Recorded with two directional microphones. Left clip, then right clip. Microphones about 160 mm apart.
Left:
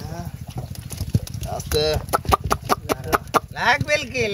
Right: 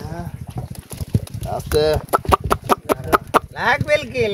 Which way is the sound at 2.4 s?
60° right (ahead or behind).